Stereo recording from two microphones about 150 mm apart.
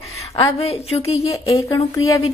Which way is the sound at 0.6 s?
45° left (ahead or behind).